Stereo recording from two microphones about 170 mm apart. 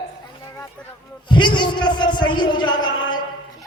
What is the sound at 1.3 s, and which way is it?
A man's voice, 25° left (ahead or behind).